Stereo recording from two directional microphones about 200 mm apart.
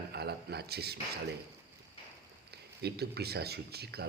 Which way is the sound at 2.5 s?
55° right (ahead or behind).